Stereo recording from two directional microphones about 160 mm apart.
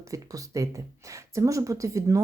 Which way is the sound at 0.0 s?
20° right (ahead or behind).